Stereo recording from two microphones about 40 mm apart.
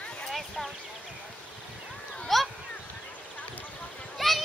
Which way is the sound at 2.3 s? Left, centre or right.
Centre.